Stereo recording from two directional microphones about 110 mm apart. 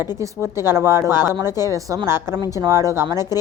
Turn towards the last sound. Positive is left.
turn(degrees=-25)  # may be behind; listen again after turning